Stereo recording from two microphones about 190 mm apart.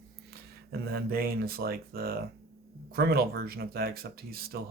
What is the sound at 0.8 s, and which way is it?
Speech, 55° right (ahead or behind).